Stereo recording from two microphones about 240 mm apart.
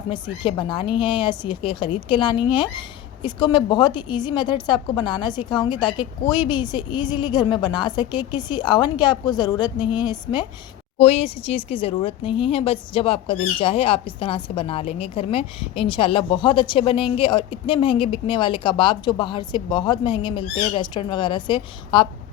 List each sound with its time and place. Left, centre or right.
0.1 s speech: centre